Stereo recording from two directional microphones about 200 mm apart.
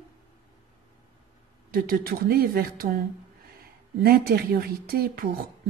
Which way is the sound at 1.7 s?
45° right (ahead or behind).